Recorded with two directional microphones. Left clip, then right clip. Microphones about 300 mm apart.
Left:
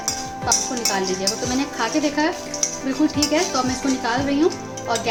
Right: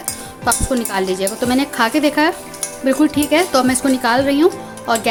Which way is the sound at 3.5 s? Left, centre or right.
Right.